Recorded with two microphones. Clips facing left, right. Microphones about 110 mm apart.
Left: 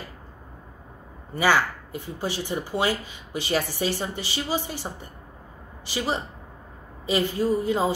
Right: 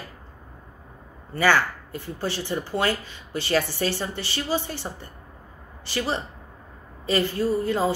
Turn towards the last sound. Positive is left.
turn(degrees=15)  # may be behind; listen again after turning